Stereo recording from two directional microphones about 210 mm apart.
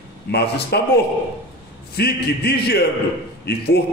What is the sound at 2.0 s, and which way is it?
A man's voice, 50° left (ahead or behind).